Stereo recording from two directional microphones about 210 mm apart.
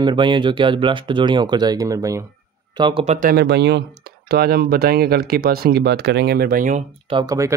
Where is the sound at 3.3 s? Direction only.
50° right (ahead or behind).